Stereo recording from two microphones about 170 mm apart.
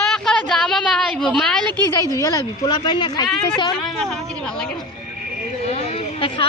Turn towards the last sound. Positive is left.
turn(degrees=35)  # may be behind; listen again after turning